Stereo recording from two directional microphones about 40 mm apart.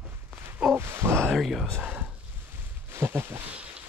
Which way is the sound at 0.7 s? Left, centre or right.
Right.